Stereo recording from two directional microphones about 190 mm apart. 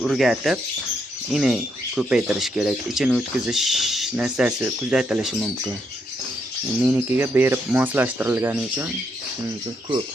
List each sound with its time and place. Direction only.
0.0 s speech: centre (ahead or behind)
6.8 s speech: 10° right (ahead or behind)